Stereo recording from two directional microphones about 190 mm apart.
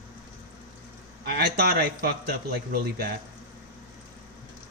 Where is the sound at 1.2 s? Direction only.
55° right (ahead or behind).